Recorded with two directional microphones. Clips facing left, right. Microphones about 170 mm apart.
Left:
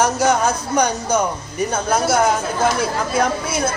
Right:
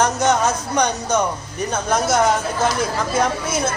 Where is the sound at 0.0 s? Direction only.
Centre (ahead or behind).